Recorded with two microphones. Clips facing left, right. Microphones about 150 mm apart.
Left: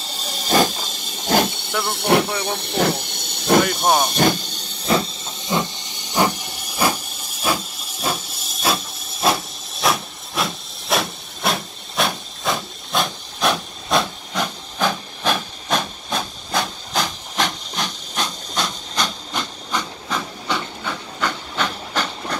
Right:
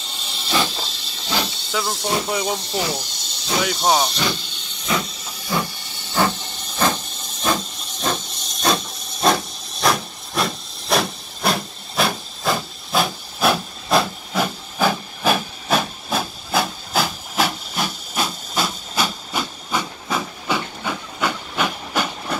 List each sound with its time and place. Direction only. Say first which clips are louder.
0.1 s hiss: left 4 dB; 40° left (ahead or behind)
1.9 s speech: left 6 dB; 60° left (ahead or behind)
3.8 s speech: left 1 dB; centre (ahead or behind)
4.1 s vehicle: left 6 dB; 50° left (ahead or behind)
4.8 s hiss: left 4 dB; 30° left (ahead or behind); by 22.4 s 10° right (ahead or behind)